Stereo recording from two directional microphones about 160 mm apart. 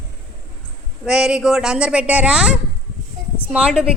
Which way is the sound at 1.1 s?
5° right (ahead or behind).